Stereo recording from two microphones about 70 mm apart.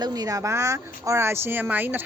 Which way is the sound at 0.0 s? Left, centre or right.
Right.